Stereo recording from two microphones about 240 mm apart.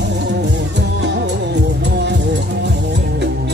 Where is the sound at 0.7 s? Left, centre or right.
Right.